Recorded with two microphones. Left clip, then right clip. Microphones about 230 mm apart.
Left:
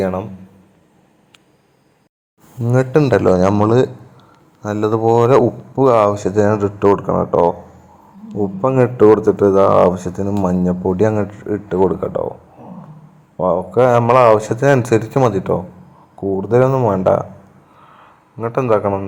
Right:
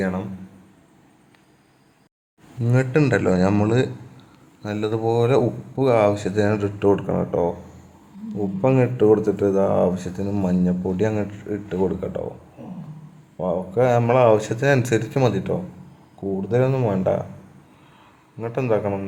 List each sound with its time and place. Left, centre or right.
0.0 s speech: centre
2.6 s speech: centre
13.3 s speech: centre
18.3 s speech: centre